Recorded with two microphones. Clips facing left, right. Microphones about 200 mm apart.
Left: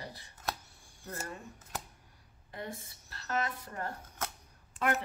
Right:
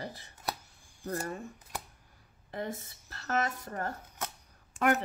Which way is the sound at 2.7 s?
45° right (ahead or behind).